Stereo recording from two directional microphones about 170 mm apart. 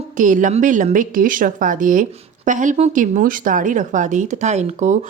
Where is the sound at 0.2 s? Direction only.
50° right (ahead or behind).